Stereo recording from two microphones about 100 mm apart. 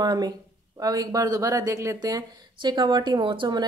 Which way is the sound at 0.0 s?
40° right (ahead or behind).